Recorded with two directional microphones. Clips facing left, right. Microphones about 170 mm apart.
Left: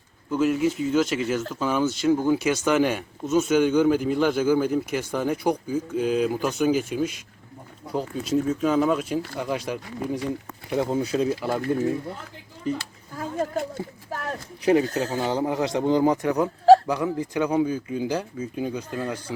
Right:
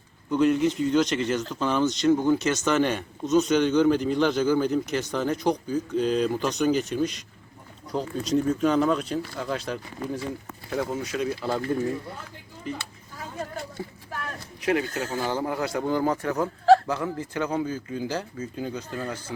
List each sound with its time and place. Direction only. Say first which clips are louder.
0.3 s a man's voice: right 1 dB; 5° left (ahead or behind)
10.7 s speech: left 5 dB; 25° left (ahead or behind)
11.3 s speech: left 1 dB; 10° left (ahead or behind)
13.1 s a sound: left 8 dB; 45° left (ahead or behind); by 15.1 s 30° left (ahead or behind)
15.1 s speech: even; 20° left (ahead or behind)